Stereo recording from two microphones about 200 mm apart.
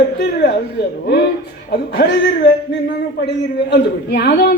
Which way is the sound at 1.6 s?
55° left (ahead or behind).